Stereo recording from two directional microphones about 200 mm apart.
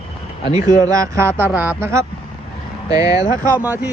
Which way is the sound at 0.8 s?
15° right (ahead or behind).